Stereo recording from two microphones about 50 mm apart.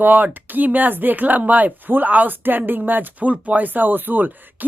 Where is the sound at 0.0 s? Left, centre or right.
Right.